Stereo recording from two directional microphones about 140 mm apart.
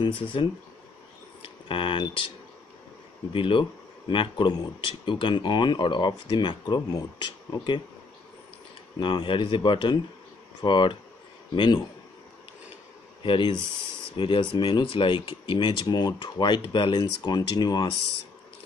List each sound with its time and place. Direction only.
0.0 s speech: 35° left (ahead or behind)
3.3 s speech: 40° left (ahead or behind)
9.0 s speech: 35° left (ahead or behind)
13.2 s speech: 35° left (ahead or behind)